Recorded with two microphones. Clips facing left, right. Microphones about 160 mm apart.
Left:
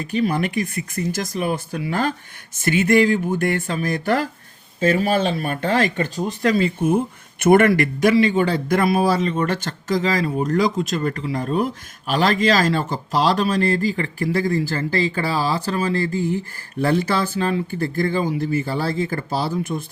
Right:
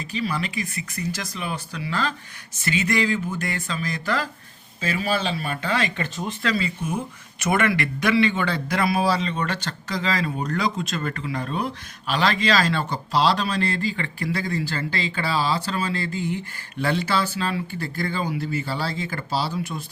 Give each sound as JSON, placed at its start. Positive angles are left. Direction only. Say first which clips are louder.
{"t": 0.0, "sound": "speech", "louder": "left 7 dB", "side_deg": 55}